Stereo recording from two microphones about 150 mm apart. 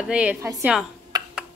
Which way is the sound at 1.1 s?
25° right (ahead or behind).